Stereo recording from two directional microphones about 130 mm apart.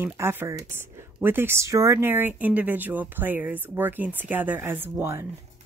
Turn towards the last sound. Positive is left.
turn(degrees=-20)  # may be behind; listen again after turning